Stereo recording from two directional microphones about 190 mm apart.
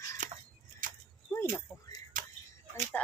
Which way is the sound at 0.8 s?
45° right (ahead or behind).